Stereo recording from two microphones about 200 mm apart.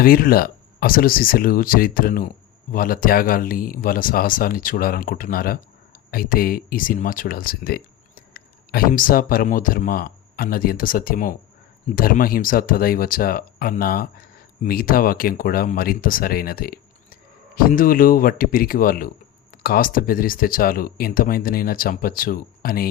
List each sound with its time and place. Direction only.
0.0 s speech: 45° left (ahead or behind)